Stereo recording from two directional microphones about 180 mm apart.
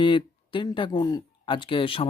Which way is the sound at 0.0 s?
25° left (ahead or behind).